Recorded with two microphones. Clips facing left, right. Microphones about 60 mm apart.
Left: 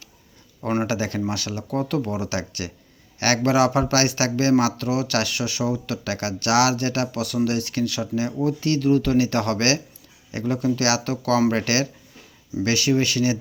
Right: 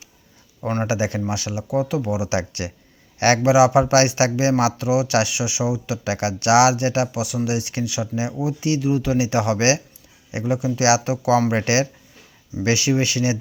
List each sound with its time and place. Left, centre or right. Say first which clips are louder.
0.9 s speech: right 2 dB; centre
2.3 s a man's voice: right 4 dB; right
3.4 s speech: right 4 dB; centre